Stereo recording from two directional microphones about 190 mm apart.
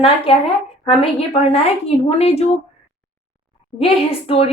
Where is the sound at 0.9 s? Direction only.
30° left (ahead or behind).